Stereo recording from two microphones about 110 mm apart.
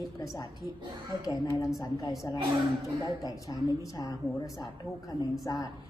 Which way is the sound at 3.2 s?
35° left (ahead or behind).